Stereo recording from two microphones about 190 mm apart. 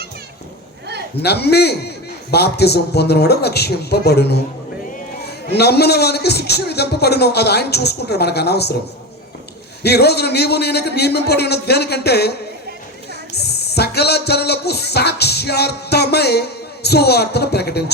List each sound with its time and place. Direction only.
1.2 s speech: 60° left (ahead or behind)
9.8 s speech: 60° left (ahead or behind)
13.3 s speech: 60° left (ahead or behind)